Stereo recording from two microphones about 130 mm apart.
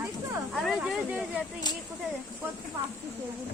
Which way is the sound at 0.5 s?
Centre (ahead or behind).